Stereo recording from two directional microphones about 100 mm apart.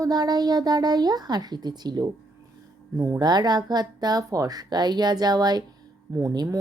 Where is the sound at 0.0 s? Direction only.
40° right (ahead or behind).